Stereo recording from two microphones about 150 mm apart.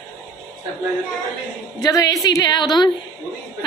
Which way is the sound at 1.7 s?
25° left (ahead or behind).